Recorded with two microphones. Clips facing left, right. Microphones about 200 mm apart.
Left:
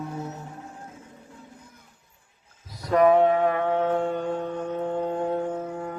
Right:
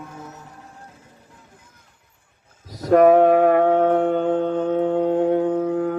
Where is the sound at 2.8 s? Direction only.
55° right (ahead or behind).